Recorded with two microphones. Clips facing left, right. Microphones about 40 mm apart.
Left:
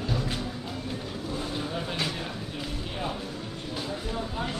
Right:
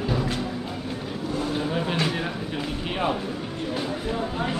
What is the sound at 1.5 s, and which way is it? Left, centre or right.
Vehicle, right.